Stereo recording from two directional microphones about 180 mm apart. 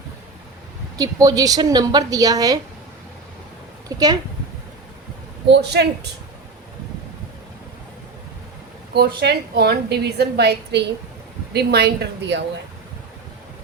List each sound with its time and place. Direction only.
0.9 s a woman's voice: 20° right (ahead or behind)
3.8 s a woman's voice: 20° right (ahead or behind)
5.5 s speech: 70° right (ahead or behind)
8.9 s a woman's voice: 65° right (ahead or behind)